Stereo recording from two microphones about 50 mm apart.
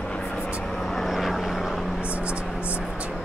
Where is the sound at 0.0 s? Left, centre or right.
Left.